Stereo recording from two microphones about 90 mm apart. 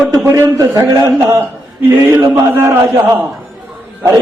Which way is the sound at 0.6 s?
40° right (ahead or behind).